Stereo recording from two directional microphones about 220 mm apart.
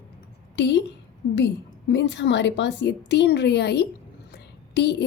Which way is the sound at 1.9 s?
55° left (ahead or behind).